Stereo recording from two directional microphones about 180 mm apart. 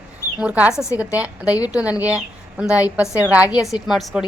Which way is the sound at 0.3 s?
10° right (ahead or behind).